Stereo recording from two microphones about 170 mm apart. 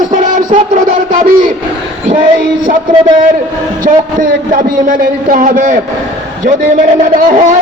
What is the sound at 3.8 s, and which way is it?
Synthetic singing, 55° right (ahead or behind).